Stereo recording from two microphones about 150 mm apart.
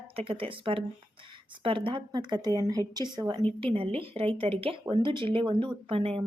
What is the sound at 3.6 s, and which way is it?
A woman's voice, 40° right (ahead or behind).